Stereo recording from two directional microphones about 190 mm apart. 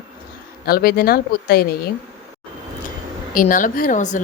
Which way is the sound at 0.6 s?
50° left (ahead or behind).